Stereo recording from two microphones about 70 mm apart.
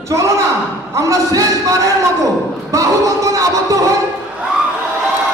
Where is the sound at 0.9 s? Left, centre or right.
Right.